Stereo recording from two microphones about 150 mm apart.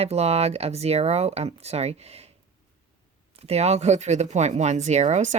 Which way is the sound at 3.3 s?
45° right (ahead or behind).